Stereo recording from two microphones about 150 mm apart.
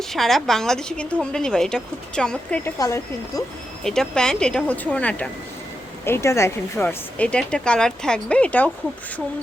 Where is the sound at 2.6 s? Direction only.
20° left (ahead or behind).